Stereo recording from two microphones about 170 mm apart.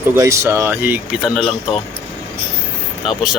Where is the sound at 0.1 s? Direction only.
15° right (ahead or behind); by 1.5 s centre (ahead or behind).